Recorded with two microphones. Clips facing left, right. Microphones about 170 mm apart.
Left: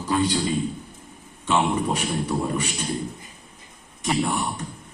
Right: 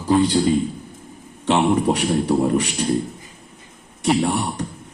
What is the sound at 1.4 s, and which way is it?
Speech, 65° right (ahead or behind).